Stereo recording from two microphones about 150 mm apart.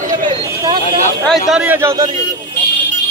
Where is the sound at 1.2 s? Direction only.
5° right (ahead or behind).